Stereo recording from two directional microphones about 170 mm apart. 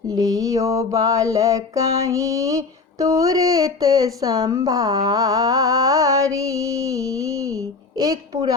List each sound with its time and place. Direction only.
0.1 s mantra: 20° right (ahead or behind)